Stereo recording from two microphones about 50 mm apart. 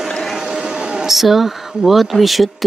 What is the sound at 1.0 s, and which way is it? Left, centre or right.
Speech, centre.